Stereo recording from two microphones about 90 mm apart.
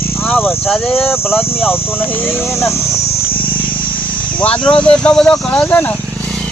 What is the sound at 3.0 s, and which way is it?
Wild animals, 30° left (ahead or behind).